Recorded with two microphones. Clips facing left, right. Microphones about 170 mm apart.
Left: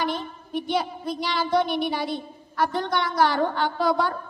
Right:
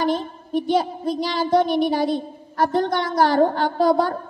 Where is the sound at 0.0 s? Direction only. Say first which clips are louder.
Right 6 dB; 40° right (ahead or behind).